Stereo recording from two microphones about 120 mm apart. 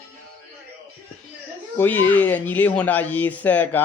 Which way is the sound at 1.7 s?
20° left (ahead or behind).